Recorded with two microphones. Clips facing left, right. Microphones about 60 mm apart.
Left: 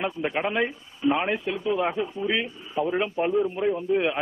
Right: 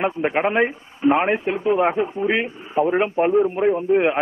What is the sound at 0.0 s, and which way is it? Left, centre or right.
A man's voice, right.